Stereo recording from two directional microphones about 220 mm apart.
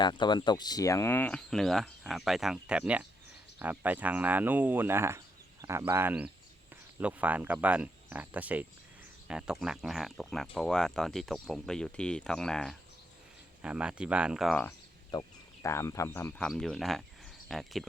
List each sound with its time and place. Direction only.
0.0 s speech: 20° left (ahead or behind); by 14.7 s centre (ahead or behind)
15.1 s speech: 15° left (ahead or behind)